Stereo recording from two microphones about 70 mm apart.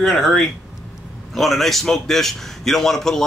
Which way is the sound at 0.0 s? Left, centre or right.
Centre.